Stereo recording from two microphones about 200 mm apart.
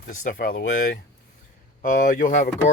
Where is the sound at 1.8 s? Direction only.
45° left (ahead or behind).